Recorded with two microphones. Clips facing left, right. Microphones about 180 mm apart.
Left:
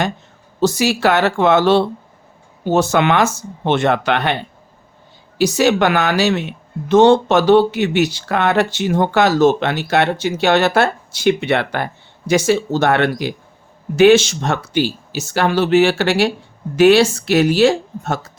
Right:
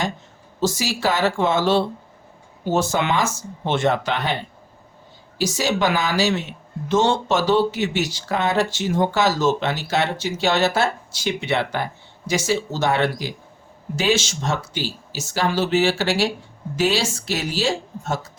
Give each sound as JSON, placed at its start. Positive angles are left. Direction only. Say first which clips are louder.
{"t": 0.6, "sound": "speech", "louder": "left 7 dB", "side_deg": 65}
{"t": 5.4, "sound": "speech", "louder": "left 7 dB", "side_deg": 65}